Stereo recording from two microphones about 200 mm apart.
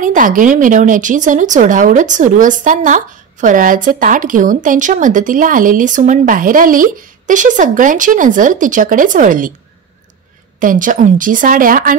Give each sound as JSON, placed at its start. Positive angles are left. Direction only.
{"t": 0.0, "sound": "speech", "side_deg": -40}
{"t": 10.6, "sound": "speech", "side_deg": -40}